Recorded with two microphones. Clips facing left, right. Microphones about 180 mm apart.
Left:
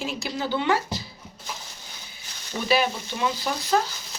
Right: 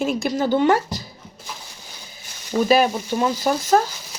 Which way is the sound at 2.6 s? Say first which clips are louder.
Right 5 dB; 45° right (ahead or behind).